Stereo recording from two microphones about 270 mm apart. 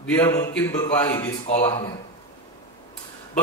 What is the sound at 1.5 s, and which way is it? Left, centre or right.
Speech, left.